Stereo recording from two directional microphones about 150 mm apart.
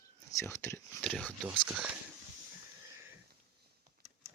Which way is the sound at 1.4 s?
10° right (ahead or behind).